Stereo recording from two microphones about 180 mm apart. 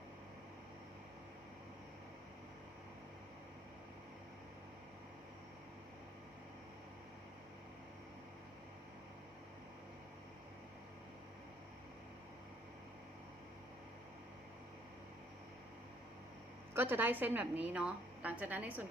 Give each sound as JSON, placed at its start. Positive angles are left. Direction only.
{"t": 16.7, "sound": "a woman's voice", "side_deg": -10}